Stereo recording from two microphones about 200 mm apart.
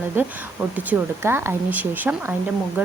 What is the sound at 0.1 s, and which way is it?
Speech, 10° right (ahead or behind).